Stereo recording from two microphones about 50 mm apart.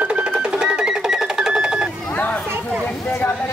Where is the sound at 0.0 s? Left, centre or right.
Right.